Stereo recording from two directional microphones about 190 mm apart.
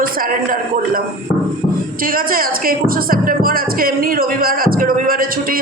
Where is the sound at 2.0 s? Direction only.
50° right (ahead or behind).